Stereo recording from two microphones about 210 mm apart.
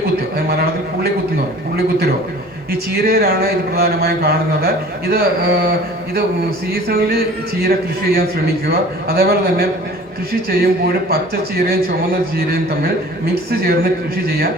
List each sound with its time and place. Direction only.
0.0 s a sound: 45° right (ahead or behind)
2.9 s speech: 50° right (ahead or behind)
6.8 s speech: 45° right (ahead or behind)